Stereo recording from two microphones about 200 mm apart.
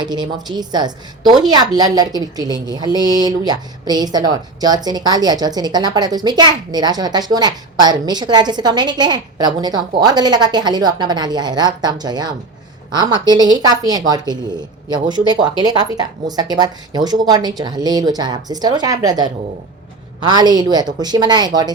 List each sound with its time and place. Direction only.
0.0 s a woman's voice: 20° right (ahead or behind)